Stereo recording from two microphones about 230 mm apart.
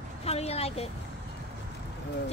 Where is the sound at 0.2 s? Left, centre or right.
Left.